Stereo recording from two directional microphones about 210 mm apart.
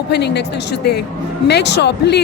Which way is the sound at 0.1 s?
55° left (ahead or behind).